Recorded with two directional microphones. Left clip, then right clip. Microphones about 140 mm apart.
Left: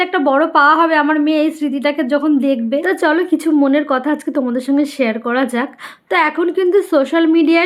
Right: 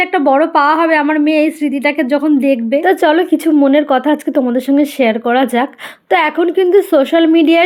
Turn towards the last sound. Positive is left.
turn(degrees=-20)  # may be behind; listen again after turning